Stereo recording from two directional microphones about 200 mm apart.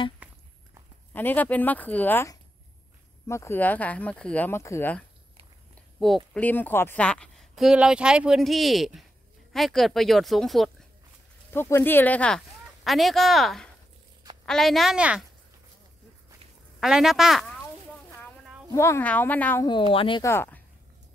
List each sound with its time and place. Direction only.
0.2 s a sound: 5° right (ahead or behind)
1.1 s a woman's voice: 10° left (ahead or behind)
11.5 s a woman's voice: 10° left (ahead or behind); by 15.2 s 5° right (ahead or behind)
16.8 s speech: centre (ahead or behind)
18.7 s speech: 15° left (ahead or behind)
19.9 s speech: 25° left (ahead or behind)
20.2 s speech: 10° left (ahead or behind)